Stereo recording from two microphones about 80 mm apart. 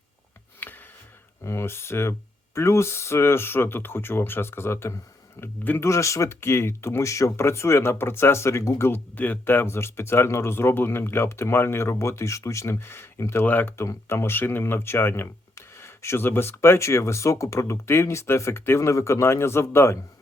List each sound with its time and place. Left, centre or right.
0.6 s a sound: left
1.5 s speech: left
9.1 s speech: left
13.4 s speech: left